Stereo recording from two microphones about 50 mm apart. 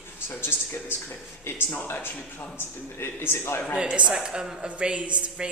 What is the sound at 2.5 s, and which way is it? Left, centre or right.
A man's voice, left.